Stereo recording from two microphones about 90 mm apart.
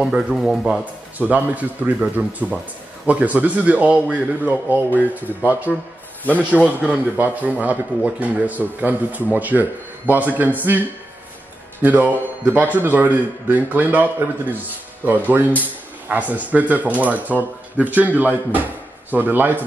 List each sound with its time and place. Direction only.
0.0 s speech: 10° right (ahead or behind)
1.1 s speech: 20° right (ahead or behind)
5.7 s speech: centre (ahead or behind)
6.9 s speech: 15° right (ahead or behind)
11.8 s speech: 20° right (ahead or behind)